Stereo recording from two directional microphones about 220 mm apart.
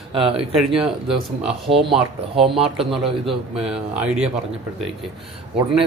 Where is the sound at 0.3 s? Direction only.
5° right (ahead or behind).